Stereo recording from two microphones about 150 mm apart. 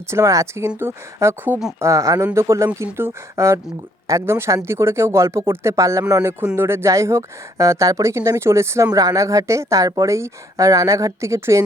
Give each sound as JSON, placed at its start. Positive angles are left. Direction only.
{"t": 0.1, "sound": "speech", "side_deg": -20}